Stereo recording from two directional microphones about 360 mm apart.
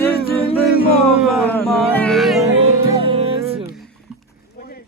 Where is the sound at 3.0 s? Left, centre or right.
Centre.